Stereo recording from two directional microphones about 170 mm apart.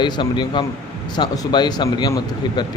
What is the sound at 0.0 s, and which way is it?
A man's voice, 25° left (ahead or behind).